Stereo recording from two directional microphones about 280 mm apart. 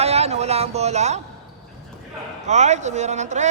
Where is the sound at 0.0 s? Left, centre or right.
Right.